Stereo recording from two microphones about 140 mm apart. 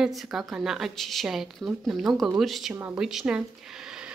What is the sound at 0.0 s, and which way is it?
Speech, centre (ahead or behind).